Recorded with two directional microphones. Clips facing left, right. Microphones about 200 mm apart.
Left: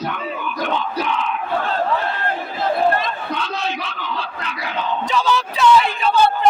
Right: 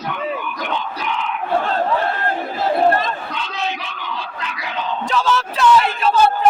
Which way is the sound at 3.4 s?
20° right (ahead or behind).